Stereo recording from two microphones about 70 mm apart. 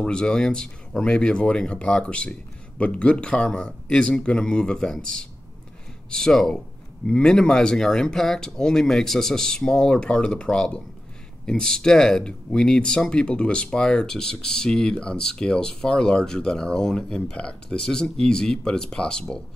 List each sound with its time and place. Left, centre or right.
0.0 s speech: centre